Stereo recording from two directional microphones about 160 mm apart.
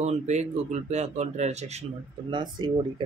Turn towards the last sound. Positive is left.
turn(degrees=-30)  # may be behind; listen again after turning